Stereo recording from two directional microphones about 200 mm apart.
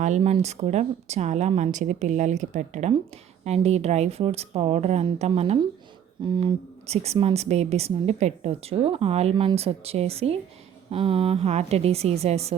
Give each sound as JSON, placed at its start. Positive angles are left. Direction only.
{"t": 0.0, "sound": "a woman's voice", "side_deg": -35}